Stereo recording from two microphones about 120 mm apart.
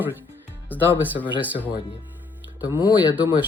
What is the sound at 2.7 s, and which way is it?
Speech, 40° left (ahead or behind).